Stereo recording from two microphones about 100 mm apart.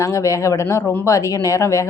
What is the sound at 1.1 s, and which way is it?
Speech, 35° left (ahead or behind).